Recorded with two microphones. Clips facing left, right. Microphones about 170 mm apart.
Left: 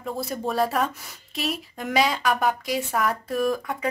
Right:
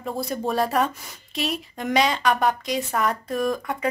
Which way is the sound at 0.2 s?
Centre (ahead or behind).